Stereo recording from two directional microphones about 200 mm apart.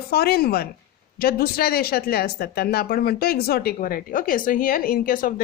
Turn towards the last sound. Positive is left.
turn(degrees=45)  # may be behind; listen again after turning